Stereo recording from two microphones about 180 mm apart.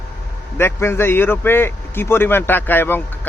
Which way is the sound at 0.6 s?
15° left (ahead or behind).